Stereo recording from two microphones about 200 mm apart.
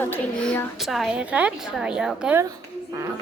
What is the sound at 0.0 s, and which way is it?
A woman's voice, 10° left (ahead or behind).